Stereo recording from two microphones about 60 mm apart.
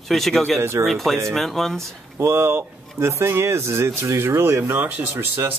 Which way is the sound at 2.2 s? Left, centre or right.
Right.